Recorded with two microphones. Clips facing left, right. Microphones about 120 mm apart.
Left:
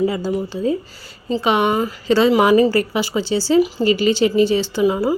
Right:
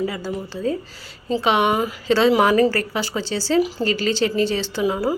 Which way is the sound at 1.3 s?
Centre (ahead or behind).